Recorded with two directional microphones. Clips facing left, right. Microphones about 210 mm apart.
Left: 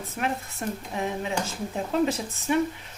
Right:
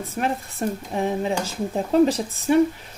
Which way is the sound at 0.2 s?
30° right (ahead or behind).